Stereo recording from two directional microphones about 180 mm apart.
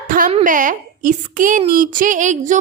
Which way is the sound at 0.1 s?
50° right (ahead or behind).